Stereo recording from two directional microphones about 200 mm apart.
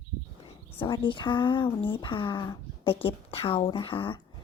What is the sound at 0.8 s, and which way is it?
Speech, 25° left (ahead or behind).